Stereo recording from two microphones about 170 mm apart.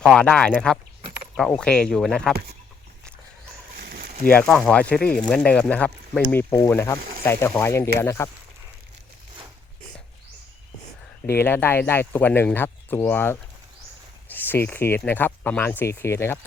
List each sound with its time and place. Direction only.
0.0 s speech: 5° left (ahead or behind)
3.8 s a sound: 65° right (ahead or behind)
4.3 s speech: 5° left (ahead or behind)
11.3 s speech: 10° left (ahead or behind)
14.3 s cricket: 10° left (ahead or behind)
14.7 s speech: 10° left (ahead or behind)